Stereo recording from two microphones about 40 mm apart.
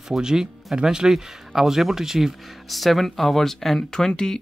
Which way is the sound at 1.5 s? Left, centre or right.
Centre.